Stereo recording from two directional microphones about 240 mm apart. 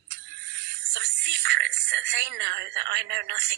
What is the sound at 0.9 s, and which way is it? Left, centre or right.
Speech, right.